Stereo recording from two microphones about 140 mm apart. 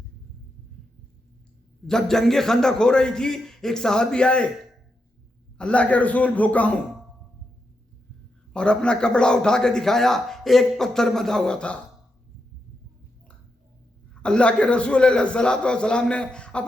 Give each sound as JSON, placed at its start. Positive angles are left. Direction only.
{"t": 1.9, "sound": "a man's voice", "side_deg": 5}
{"t": 5.5, "sound": "a man's voice", "side_deg": 10}
{"t": 8.5, "sound": "a man's voice", "side_deg": 5}
{"t": 14.1, "sound": "a man's voice", "side_deg": 5}